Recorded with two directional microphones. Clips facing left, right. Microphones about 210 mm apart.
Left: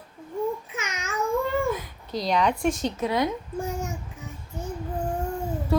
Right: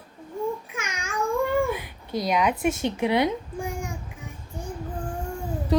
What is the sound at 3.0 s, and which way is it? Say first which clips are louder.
Speech: right 2 dB; 15° right (ahead or behind).